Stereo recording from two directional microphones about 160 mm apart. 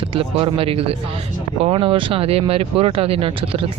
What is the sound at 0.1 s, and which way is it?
Speech, 35° right (ahead or behind).